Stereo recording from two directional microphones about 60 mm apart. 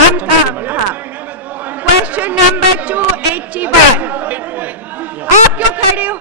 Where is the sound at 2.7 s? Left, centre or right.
Right.